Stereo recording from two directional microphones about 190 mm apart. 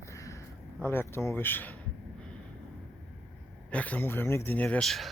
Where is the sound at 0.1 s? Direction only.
15° left (ahead or behind).